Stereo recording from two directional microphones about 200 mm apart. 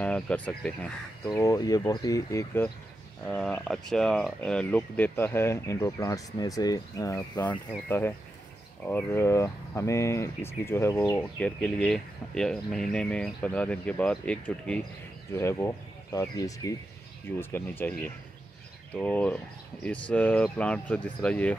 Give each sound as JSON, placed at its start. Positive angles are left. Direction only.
{"t": 0.0, "sound": "speech", "side_deg": 5}
{"t": 1.2, "sound": "speech", "side_deg": 15}
{"t": 8.8, "sound": "speech", "side_deg": 10}